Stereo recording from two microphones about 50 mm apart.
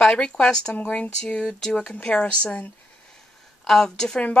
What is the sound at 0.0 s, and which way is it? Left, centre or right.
Speech, left.